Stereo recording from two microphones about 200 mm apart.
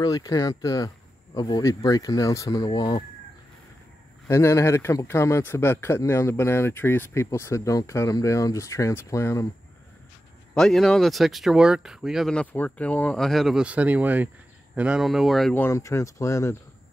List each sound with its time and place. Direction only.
0.0 s speech: 20° left (ahead or behind)
4.3 s speech: 15° left (ahead or behind)
10.5 s speech: centre (ahead or behind)